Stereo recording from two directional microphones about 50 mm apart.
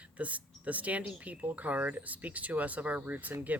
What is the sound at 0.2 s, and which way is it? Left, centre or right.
Speech, right.